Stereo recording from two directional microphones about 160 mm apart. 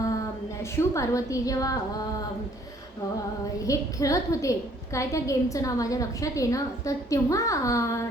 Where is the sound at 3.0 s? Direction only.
20° left (ahead or behind).